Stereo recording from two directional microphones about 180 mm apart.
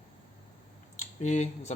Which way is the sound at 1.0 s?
40° left (ahead or behind).